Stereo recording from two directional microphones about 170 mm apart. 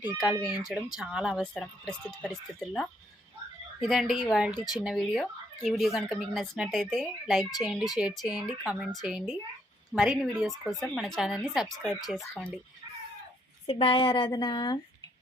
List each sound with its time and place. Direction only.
0.5 s speech: 5° right (ahead or behind)
4.5 s speech: 25° left (ahead or behind)
4.8 s speech: centre (ahead or behind)
12.2 s speech: 10° left (ahead or behind)
13.7 s speech: 30° left (ahead or behind)